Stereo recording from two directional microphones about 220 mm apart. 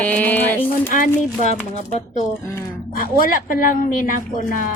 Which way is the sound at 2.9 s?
40° left (ahead or behind).